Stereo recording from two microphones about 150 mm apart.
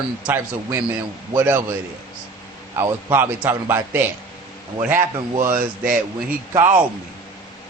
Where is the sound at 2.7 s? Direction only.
15° right (ahead or behind).